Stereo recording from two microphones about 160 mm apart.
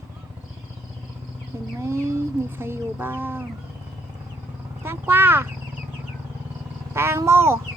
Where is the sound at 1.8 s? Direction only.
15° right (ahead or behind).